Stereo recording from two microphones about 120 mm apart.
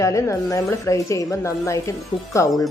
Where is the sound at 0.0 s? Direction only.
25° left (ahead or behind).